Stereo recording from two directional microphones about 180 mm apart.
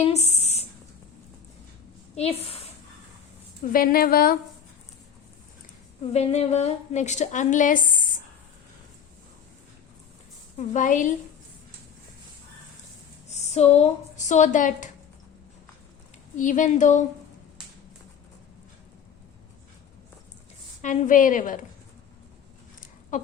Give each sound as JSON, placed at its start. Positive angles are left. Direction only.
{"t": 0.0, "sound": "a sound", "side_deg": 35}
{"t": 2.1, "sound": "a woman's voice", "side_deg": 35}
{"t": 3.6, "sound": "a woman's voice", "side_deg": 50}
{"t": 6.1, "sound": "a woman's voice", "side_deg": 35}
{"t": 10.6, "sound": "a woman's voice", "side_deg": 40}
{"t": 13.3, "sound": "a woman's voice", "side_deg": 35}
{"t": 16.4, "sound": "a woman's voice", "side_deg": 45}
{"t": 20.8, "sound": "a woman's voice", "side_deg": 45}
{"t": 23.1, "sound": "a sound", "side_deg": 45}